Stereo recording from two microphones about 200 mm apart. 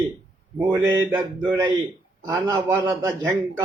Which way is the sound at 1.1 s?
10° right (ahead or behind).